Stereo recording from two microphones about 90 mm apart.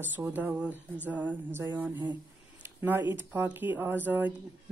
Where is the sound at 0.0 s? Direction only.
20° right (ahead or behind).